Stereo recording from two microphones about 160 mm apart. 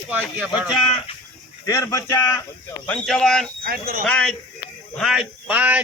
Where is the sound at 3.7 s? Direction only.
65° right (ahead or behind).